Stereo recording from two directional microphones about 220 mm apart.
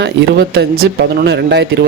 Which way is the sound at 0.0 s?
50° right (ahead or behind).